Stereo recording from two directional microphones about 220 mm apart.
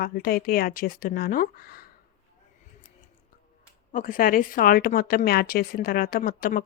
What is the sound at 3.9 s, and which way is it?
A woman's voice, 40° left (ahead or behind).